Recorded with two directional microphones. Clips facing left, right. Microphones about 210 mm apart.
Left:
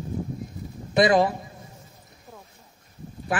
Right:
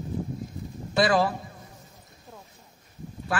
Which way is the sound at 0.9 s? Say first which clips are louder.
Left 3 dB; 20° left (ahead or behind).